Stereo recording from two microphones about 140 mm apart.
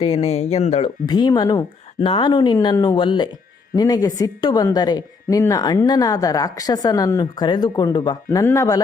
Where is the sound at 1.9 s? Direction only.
40° left (ahead or behind).